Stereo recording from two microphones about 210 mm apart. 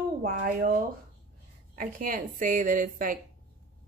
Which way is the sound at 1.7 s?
40° right (ahead or behind).